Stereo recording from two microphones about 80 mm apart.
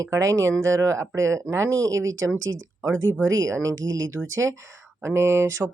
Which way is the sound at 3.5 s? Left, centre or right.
Right.